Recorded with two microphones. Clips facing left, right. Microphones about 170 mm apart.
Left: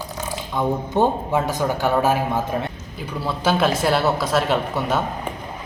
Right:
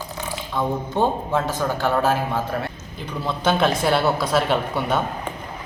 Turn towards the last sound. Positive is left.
turn(degrees=0)  # may be behind; listen again after turning